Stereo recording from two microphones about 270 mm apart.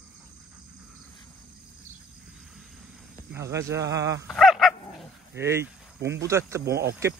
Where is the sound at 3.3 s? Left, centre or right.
Centre.